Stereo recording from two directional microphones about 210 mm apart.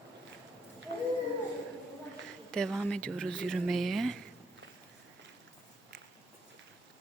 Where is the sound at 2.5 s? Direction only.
5° left (ahead or behind).